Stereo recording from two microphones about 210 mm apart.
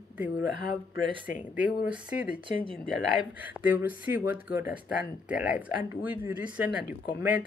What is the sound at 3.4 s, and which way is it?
Speech, 10° right (ahead or behind).